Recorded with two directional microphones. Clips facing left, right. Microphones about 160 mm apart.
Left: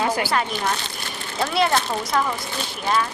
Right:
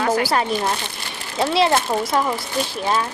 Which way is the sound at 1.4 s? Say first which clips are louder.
Right 3 dB; 25° right (ahead or behind).